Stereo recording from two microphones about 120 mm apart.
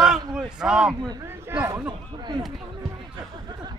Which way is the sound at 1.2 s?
20° right (ahead or behind).